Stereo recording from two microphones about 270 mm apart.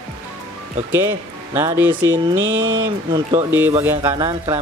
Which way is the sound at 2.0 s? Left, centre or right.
Right.